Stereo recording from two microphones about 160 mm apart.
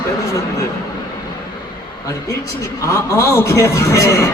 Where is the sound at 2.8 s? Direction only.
20° left (ahead or behind).